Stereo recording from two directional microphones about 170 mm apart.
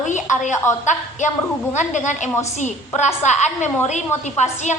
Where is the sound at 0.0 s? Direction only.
45° left (ahead or behind).